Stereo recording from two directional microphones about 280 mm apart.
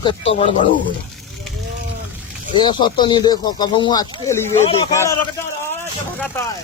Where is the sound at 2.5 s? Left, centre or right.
Centre.